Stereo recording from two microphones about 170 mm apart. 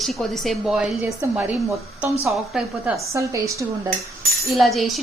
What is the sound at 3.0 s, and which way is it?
Speech, 20° right (ahead or behind).